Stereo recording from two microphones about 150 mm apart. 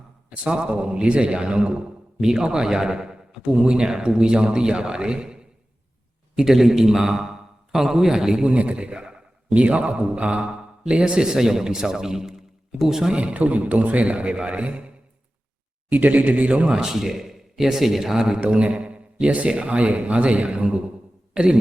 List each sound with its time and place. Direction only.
0.3 s a man's voice: 5° right (ahead or behind)